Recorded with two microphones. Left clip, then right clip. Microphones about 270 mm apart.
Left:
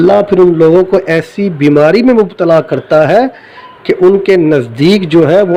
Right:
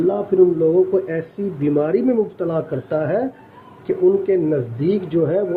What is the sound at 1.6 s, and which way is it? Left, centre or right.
A man's voice, left.